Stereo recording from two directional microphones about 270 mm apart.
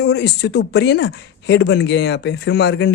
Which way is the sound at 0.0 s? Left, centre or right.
Left.